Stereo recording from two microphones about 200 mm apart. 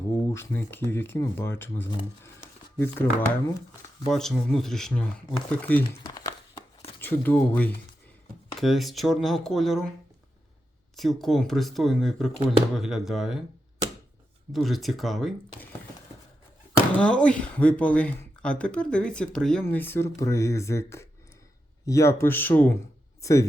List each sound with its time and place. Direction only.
0.1 s speech: 10° left (ahead or behind)
6.0 s crumpling: 20° left (ahead or behind)
7.0 s speech: 10° left (ahead or behind)
10.9 s speech: centre (ahead or behind)
14.5 s speech: centre (ahead or behind)
17.0 s speech: 5° left (ahead or behind)